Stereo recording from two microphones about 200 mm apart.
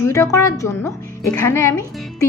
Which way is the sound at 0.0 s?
15° left (ahead or behind).